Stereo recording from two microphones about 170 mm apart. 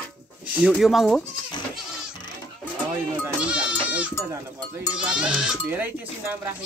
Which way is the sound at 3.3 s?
5° right (ahead or behind).